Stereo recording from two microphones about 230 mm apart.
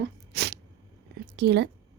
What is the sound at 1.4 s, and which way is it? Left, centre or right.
Speech, right.